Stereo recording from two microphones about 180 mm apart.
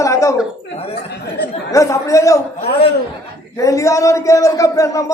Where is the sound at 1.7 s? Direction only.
20° left (ahead or behind).